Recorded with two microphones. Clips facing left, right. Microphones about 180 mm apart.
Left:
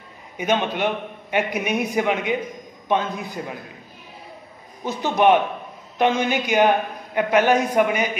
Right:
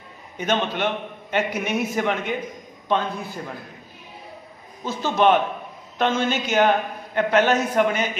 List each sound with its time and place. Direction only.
0.4 s a man's voice: 10° left (ahead or behind)
4.8 s a man's voice: 15° left (ahead or behind)